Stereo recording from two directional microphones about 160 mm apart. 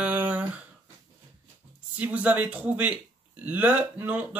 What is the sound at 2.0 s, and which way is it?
Speech, 10° right (ahead or behind).